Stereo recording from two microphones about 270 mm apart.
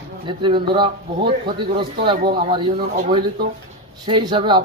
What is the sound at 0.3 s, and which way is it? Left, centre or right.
Speech, centre.